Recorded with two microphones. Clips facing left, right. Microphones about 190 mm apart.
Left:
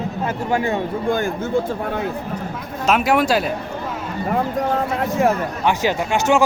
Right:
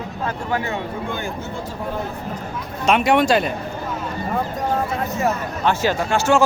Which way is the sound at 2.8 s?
5° left (ahead or behind).